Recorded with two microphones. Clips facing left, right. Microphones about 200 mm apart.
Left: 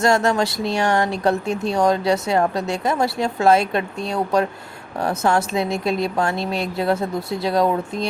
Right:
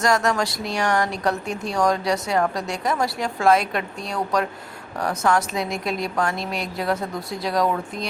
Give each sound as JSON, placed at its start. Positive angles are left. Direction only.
{"t": 0.0, "sound": "speech", "side_deg": 25}